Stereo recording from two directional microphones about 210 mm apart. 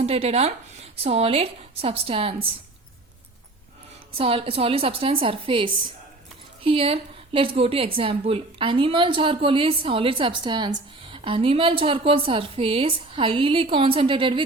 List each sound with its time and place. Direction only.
0.0 s a woman's voice: 30° right (ahead or behind)
4.2 s a woman's voice: 25° right (ahead or behind)